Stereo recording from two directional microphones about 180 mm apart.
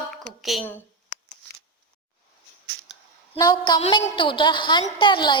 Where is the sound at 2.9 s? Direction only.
Centre (ahead or behind).